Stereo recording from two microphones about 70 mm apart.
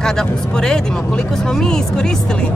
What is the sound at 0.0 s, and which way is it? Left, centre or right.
Speech, centre.